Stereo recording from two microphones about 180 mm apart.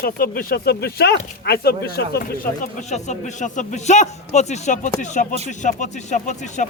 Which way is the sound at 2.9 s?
40° left (ahead or behind).